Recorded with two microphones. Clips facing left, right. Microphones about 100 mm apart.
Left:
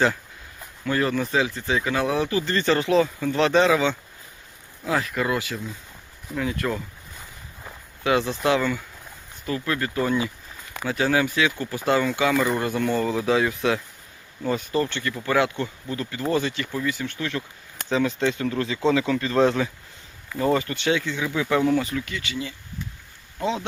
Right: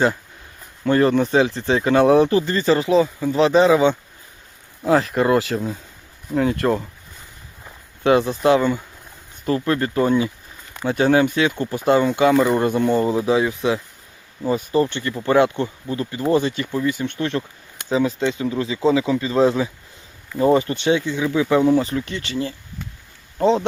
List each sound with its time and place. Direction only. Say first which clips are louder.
0.9 s speech: right 7 dB; 30° right (ahead or behind)
2.4 s speech: right 4 dB; 10° right (ahead or behind)
3.7 s speech: right 6 dB; 20° right (ahead or behind)
4.9 s speech: right 8 dB; 30° right (ahead or behind)
8.5 s speech: right 5 dB; 25° right (ahead or behind)
14.7 s speech: right 5 dB; 20° right (ahead or behind)
17.0 s speech: right 6 dB; 30° right (ahead or behind)
17.8 s speech: right 3 dB; 10° right (ahead or behind)
20.4 s speech: right 6 dB; 20° right (ahead or behind)